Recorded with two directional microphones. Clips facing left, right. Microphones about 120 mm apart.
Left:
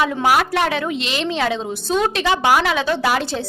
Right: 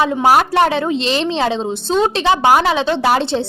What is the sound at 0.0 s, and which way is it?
A woman's voice, 35° right (ahead or behind).